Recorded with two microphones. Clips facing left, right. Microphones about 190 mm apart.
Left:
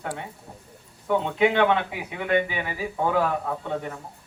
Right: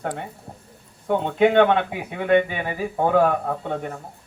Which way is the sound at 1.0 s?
50° right (ahead or behind).